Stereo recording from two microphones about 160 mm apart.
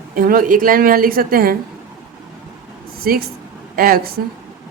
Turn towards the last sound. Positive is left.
turn(degrees=-65)  # may be behind; listen again after turning